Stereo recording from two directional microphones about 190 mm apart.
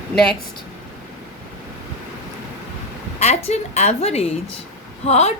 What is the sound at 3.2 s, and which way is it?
A woman's voice, 35° left (ahead or behind).